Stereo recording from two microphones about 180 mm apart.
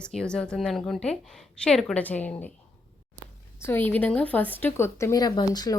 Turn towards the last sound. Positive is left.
turn(degrees=20)  # may be behind; listen again after turning